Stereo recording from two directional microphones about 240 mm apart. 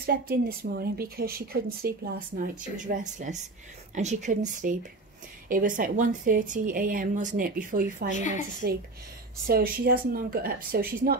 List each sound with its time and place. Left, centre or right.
0.0 s a woman's voice: right
8.1 s a woman's voice: left
9.5 s a woman's voice: right